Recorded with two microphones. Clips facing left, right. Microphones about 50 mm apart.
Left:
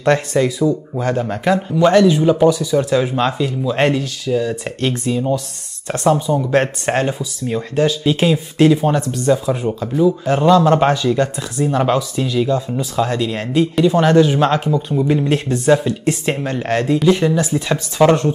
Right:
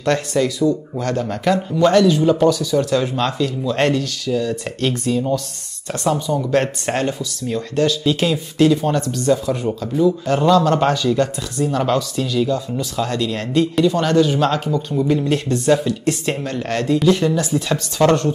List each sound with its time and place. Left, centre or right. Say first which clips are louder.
0.0 s speech: left 3 dB; centre